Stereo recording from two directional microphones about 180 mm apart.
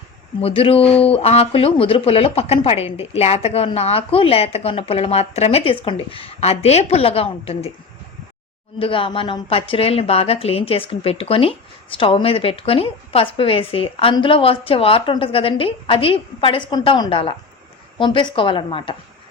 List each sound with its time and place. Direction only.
0.4 s a woman's voice: 35° left (ahead or behind)
8.8 s a woman's voice: 30° left (ahead or behind)